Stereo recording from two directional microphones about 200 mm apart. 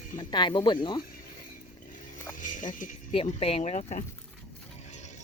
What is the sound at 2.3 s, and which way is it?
Music, 40° left (ahead or behind).